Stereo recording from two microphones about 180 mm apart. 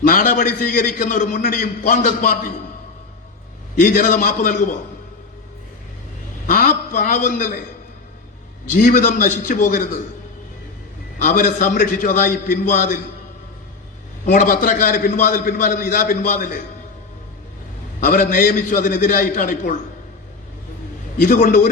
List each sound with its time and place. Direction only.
0.0 s a man's voice: 50° left (ahead or behind)
3.8 s a man's voice: 50° left (ahead or behind)
6.5 s a man's voice: 50° left (ahead or behind)
8.8 s a man's voice: 45° left (ahead or behind)
11.2 s a man's voice: 45° left (ahead or behind)
14.3 s a man's voice: 45° left (ahead or behind)
18.0 s a man's voice: 50° left (ahead or behind)
21.2 s a man's voice: 45° left (ahead or behind)